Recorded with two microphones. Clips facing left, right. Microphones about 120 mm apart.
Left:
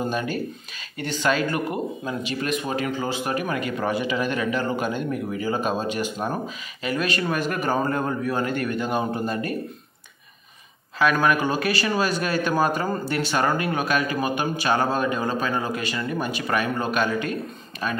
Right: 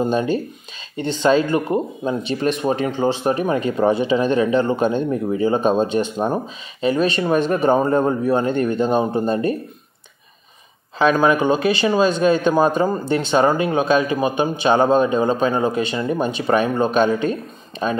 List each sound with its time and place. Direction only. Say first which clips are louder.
0.0 s speech: right 7 dB; 25° right (ahead or behind)
11.0 s speech: right 5 dB; 25° right (ahead or behind)